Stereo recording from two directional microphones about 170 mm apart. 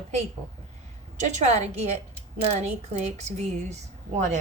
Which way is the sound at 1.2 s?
40° right (ahead or behind).